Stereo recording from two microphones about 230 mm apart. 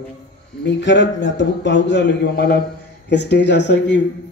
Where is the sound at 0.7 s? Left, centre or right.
Left.